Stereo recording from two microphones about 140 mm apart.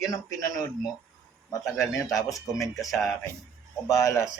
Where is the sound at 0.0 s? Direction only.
25° left (ahead or behind).